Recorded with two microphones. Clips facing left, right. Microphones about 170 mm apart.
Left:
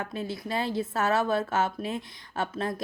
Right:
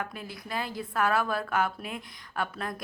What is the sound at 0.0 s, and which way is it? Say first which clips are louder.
A woman's voice: left 5 dB; 25° left (ahead or behind).